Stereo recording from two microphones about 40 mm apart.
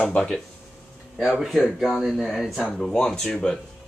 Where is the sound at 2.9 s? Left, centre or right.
Centre.